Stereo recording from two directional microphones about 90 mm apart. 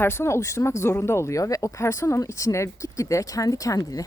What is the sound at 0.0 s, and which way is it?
Speech, 25° left (ahead or behind).